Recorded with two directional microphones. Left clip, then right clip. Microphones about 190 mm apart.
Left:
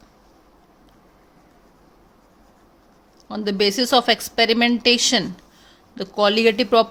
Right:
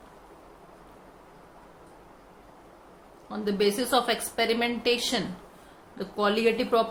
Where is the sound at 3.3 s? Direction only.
45° left (ahead or behind).